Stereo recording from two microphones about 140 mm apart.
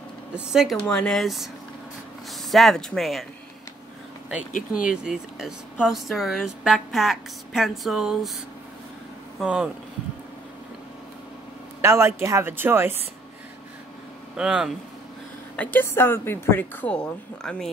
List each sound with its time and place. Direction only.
0.3 s speech: 5° right (ahead or behind)
2.5 s speech: centre (ahead or behind)
4.8 s speech: 5° right (ahead or behind)
9.4 s speech: 10° right (ahead or behind)
11.8 s a man's voice: 20° right (ahead or behind)
14.3 s speech: 5° right (ahead or behind)
15.5 s a woman's voice: 10° left (ahead or behind)